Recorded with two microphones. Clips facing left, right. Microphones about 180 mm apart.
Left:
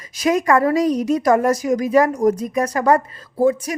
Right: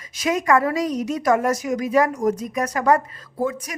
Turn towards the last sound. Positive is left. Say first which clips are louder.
# left 8 dB
turn(degrees=30)  # may be behind; listen again after turning